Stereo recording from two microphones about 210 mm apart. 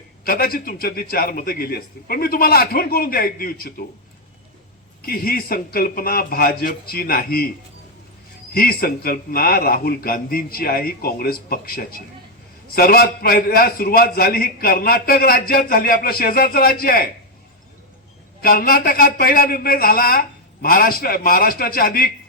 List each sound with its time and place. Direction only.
0.3 s a man's voice: 45° left (ahead or behind)
5.0 s a man's voice: 45° left (ahead or behind)
8.5 s a man's voice: 45° left (ahead or behind)
18.4 s a man's voice: 45° left (ahead or behind)